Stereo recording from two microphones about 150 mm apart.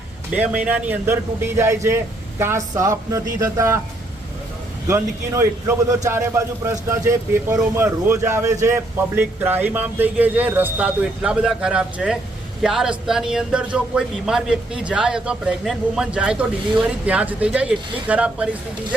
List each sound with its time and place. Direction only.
0.3 s a man's voice: 10° right (ahead or behind)
4.9 s a man's voice: 20° right (ahead or behind)